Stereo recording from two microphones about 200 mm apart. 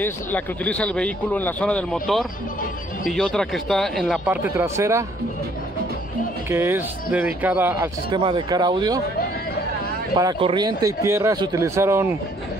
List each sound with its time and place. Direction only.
0.0 s speech: 10° left (ahead or behind)
4.6 s speech: 15° right (ahead or behind)
6.5 s speech: 10° right (ahead or behind)
8.1 s speech: 25° right (ahead or behind)
10.1 s speech: 20° right (ahead or behind)